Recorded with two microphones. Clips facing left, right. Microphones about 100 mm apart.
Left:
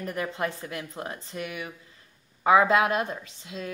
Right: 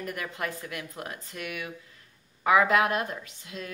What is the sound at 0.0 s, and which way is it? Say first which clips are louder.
Speech: left 4 dB; 25° left (ahead or behind).